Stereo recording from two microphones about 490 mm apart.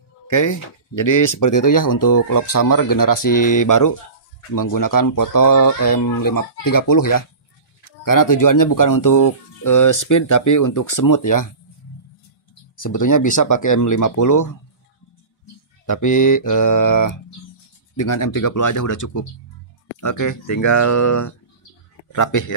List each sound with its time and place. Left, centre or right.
0.3 s speech: left
12.7 s speech: left
15.9 s speech: left